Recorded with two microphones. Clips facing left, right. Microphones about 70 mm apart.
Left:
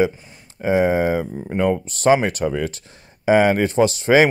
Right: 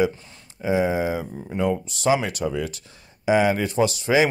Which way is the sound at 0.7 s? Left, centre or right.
Left.